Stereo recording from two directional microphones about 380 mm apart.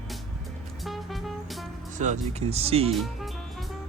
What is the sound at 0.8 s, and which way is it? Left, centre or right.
Music, centre.